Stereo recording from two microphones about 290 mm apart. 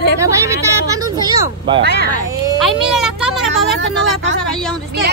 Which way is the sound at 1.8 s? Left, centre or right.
Right.